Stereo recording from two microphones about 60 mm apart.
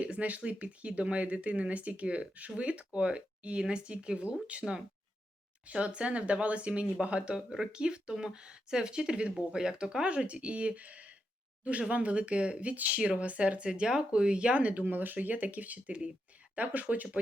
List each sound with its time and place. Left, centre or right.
0.0 s speech: right
5.6 s speech: centre